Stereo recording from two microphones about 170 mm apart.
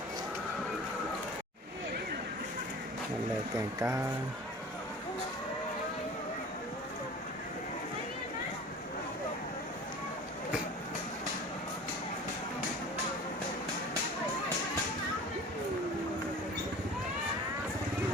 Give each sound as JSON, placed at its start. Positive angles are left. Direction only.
{"t": 3.8, "sound": "speech", "side_deg": -15}